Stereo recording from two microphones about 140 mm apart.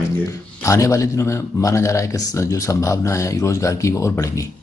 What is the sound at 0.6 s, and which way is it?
Speech, 20° left (ahead or behind).